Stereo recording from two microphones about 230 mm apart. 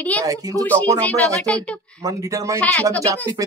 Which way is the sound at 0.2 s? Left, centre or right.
Centre.